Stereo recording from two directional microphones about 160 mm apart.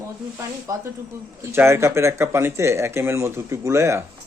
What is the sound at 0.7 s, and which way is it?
A woman's voice, 20° right (ahead or behind).